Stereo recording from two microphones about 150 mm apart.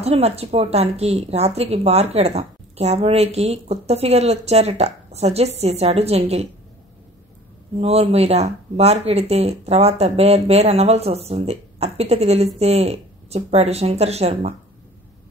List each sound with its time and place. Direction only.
0.0 s a woman's voice: 45° right (ahead or behind)
7.8 s a woman's voice: 45° right (ahead or behind)